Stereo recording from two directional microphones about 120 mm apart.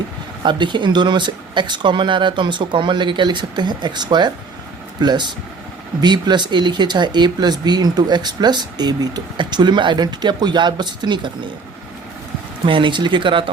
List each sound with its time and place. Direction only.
0.4 s speech: 40° right (ahead or behind)
12.6 s speech: 45° right (ahead or behind)